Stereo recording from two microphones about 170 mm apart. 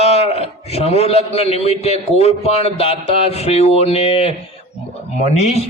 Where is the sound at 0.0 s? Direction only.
35° left (ahead or behind).